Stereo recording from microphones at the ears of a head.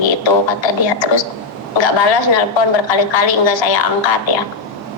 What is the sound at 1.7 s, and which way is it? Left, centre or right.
A woman's voice, left.